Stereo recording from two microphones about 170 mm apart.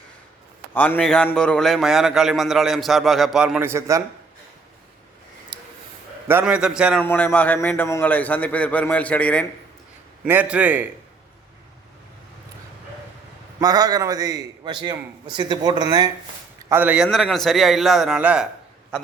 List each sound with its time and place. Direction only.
0.7 s a man's voice: 10° left (ahead or behind); by 4.0 s 15° right (ahead or behind)
5.5 s a sound: 30° right (ahead or behind)
6.2 s a man's voice: 10° right (ahead or behind)
7.0 s a man's voice: 10° left (ahead or behind)
10.2 s a man's voice: 10° right (ahead or behind)
13.6 s a man's voice: 25° right (ahead or behind)
16.6 s a man's voice: 10° right (ahead or behind)